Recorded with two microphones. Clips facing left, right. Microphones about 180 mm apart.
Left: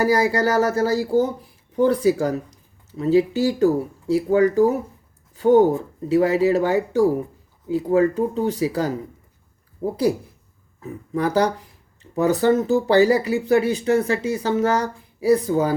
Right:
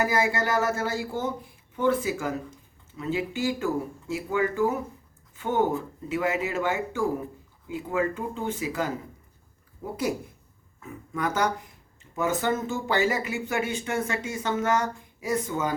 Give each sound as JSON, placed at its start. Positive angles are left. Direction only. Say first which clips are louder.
{"t": 0.0, "sound": "speech", "louder": "left 7 dB", "side_deg": 35}